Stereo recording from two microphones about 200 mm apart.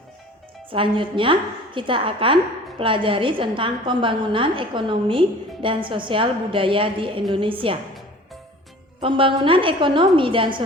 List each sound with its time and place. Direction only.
0.7 s a woman's voice: 25° right (ahead or behind)
9.0 s a woman's voice: 25° right (ahead or behind)